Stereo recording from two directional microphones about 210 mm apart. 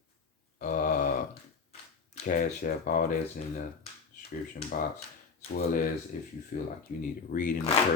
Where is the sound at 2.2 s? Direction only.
40° left (ahead or behind).